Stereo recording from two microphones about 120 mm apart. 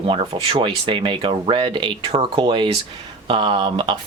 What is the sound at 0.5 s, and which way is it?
Speech, 40° right (ahead or behind).